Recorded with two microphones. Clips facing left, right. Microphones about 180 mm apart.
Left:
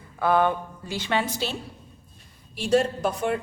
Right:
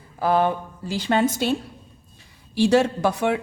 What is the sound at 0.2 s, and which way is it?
Mantra, 30° right (ahead or behind).